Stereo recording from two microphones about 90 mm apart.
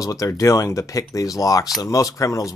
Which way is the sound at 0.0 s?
40° left (ahead or behind).